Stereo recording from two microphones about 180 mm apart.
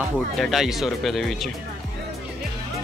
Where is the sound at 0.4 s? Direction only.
Centre (ahead or behind).